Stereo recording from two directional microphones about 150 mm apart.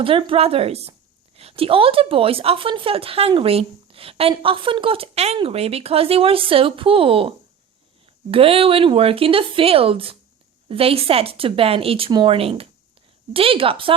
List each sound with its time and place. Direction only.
0.0 s a woman's voice: 35° right (ahead or behind)